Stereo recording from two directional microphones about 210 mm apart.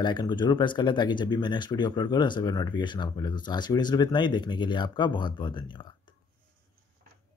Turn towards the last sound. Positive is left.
turn(degrees=20)  # may be behind; listen again after turning